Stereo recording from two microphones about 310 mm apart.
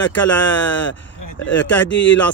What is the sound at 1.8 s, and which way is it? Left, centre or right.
Speech, left.